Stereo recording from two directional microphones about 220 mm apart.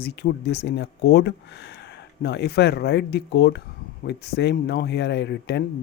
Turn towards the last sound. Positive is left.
turn(degrees=50)  # may be behind; listen again after turning